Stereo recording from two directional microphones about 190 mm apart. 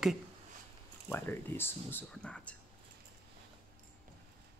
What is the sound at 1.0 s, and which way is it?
Speech, 10° left (ahead or behind).